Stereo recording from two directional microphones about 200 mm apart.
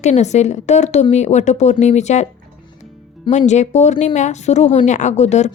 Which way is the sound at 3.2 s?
35° left (ahead or behind).